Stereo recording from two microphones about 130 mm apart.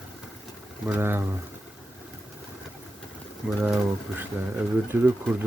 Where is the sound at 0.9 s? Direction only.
15° right (ahead or behind).